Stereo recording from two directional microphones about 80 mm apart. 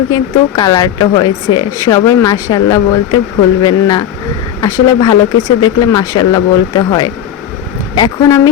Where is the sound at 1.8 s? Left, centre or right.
Left.